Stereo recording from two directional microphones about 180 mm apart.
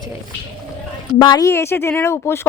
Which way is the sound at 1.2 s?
20° left (ahead or behind).